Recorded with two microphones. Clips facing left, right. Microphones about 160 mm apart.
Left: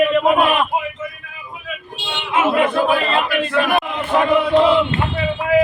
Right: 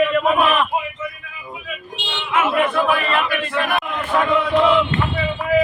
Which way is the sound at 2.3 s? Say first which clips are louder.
Left 2 dB; 30° left (ahead or behind).